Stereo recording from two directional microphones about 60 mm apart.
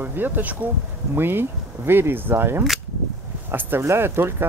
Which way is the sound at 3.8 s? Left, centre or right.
Right.